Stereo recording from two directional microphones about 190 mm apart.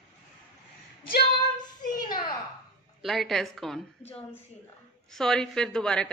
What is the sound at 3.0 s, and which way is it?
Speech, centre (ahead or behind).